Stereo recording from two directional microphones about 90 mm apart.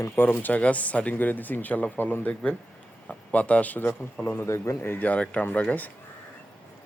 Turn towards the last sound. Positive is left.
turn(degrees=20)  # may be behind; listen again after turning